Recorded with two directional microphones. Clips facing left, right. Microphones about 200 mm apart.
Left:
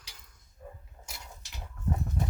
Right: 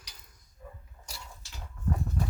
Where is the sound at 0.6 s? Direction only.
40° left (ahead or behind).